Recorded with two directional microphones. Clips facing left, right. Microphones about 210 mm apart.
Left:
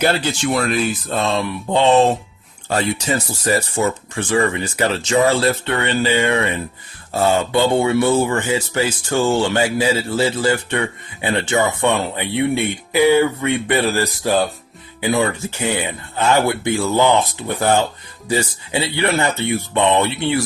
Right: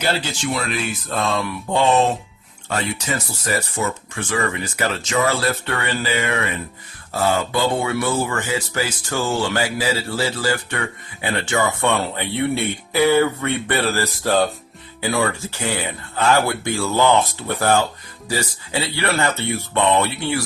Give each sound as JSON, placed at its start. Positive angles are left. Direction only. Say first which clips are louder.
{"t": 0.0, "sound": "speech", "louder": "left 5 dB", "side_deg": 55}
{"t": 1.1, "sound": "speech", "louder": "even", "side_deg": 25}